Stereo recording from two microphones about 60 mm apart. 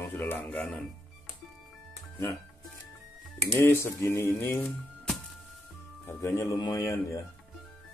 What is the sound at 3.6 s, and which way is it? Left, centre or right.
Music, left.